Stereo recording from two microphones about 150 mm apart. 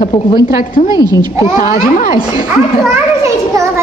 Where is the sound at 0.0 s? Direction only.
30° left (ahead or behind).